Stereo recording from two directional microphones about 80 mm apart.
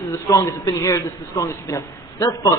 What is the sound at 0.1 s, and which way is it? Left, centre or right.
A man's voice, left.